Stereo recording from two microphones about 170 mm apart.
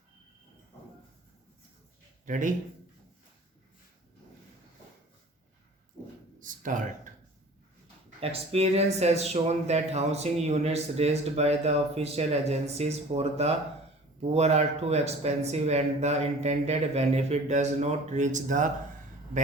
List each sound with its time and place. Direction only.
2.2 s speech: 50° right (ahead or behind)
6.4 s a sound: 50° right (ahead or behind)
8.2 s speech: 35° right (ahead or behind)